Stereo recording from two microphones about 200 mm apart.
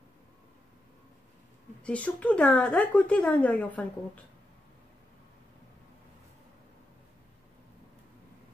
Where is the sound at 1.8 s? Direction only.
5° left (ahead or behind).